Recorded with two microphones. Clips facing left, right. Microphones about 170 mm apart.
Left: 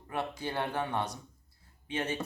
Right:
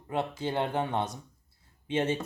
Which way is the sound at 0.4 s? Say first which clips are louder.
Right 4 dB; 20° right (ahead or behind).